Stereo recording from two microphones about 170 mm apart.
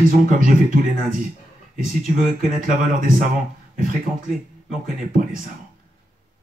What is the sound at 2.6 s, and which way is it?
Speech, 55° right (ahead or behind).